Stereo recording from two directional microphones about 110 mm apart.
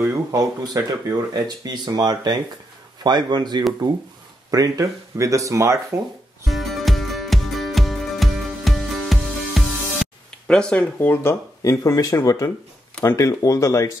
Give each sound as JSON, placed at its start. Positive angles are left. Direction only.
{"t": 0.1, "sound": "speech", "side_deg": -30}
{"t": 4.5, "sound": "speech", "side_deg": -30}
{"t": 6.4, "sound": "music", "side_deg": 0}
{"t": 11.6, "sound": "speech", "side_deg": 30}